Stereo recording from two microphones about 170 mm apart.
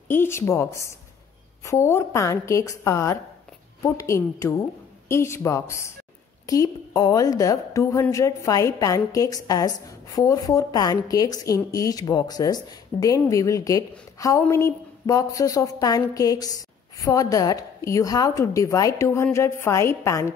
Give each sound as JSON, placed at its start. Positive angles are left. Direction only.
{"t": 0.1, "sound": "a woman's voice", "side_deg": 15}